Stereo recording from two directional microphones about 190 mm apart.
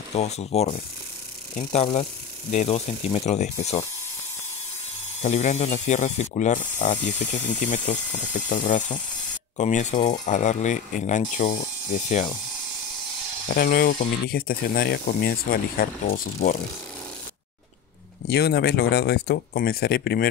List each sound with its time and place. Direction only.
0.1 s speech: 35° left (ahead or behind)
5.2 s speech: 35° left (ahead or behind)
13.5 s speech: 55° left (ahead or behind)
18.2 s speech: 60° left (ahead or behind)